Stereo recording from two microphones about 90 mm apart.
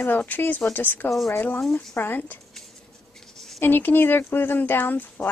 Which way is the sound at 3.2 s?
5° left (ahead or behind).